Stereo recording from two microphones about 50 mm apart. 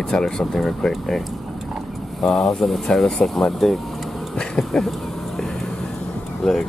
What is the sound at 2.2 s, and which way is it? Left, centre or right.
Speech, centre.